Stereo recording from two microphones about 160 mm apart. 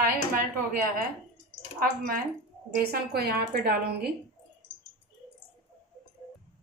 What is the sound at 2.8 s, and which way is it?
A woman's voice, 75° right (ahead or behind).